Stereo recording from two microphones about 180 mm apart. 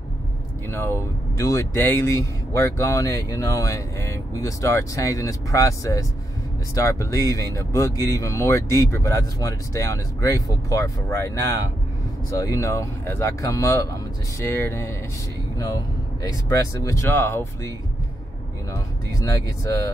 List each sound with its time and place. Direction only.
0.7 s speech: 15° left (ahead or behind)